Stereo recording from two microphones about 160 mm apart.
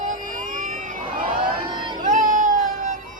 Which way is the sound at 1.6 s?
60° right (ahead or behind).